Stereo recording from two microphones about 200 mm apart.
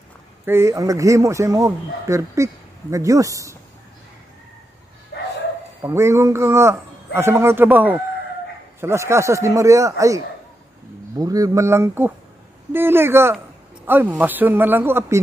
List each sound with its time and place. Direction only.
0.5 s speech: 15° right (ahead or behind)
5.1 s bow-wow: 55° left (ahead or behind)
5.8 s speech: 15° right (ahead or behind)